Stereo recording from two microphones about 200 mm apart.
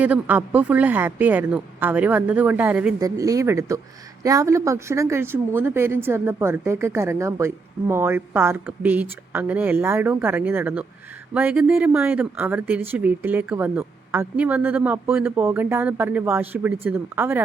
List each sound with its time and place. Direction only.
0.0 s speech: 10° right (ahead or behind)